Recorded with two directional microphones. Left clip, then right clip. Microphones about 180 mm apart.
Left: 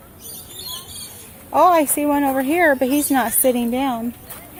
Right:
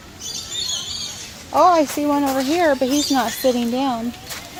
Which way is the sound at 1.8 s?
20° left (ahead or behind).